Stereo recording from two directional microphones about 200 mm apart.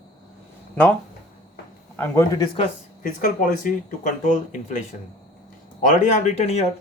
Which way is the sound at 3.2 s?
45° left (ahead or behind).